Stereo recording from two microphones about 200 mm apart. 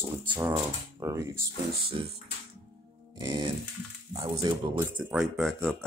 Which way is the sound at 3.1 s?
20° right (ahead or behind).